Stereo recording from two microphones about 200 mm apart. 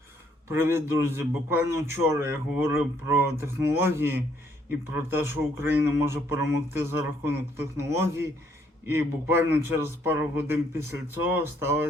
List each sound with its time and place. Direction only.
0.4 s a man's voice: 10° right (ahead or behind)